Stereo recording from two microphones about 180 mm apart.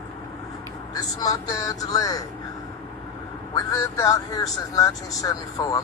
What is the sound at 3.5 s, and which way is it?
Speech, 20° left (ahead or behind).